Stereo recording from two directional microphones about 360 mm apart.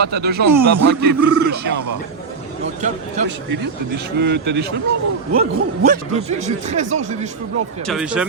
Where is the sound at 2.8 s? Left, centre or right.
Centre.